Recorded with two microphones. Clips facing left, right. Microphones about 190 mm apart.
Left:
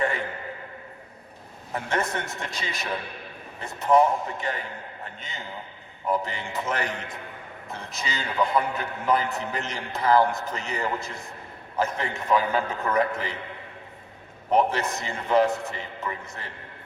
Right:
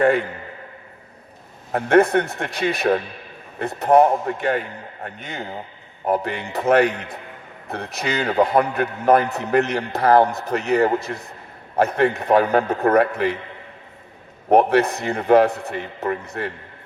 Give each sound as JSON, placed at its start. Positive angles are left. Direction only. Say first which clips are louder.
{"t": 1.7, "sound": "a man's voice", "louder": "right 13 dB", "side_deg": -60}
{"t": 14.5, "sound": "a man's voice", "louder": "right 8 dB", "side_deg": -60}